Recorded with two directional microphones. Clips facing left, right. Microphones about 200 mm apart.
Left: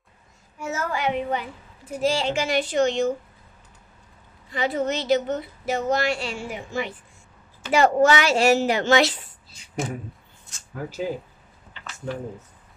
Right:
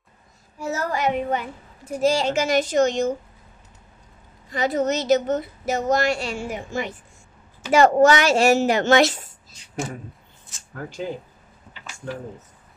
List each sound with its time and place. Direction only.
0.6 s a child's voice: 35° right (ahead or behind)
4.5 s a woman's voice: 45° right (ahead or behind)
10.7 s speech: 5° left (ahead or behind)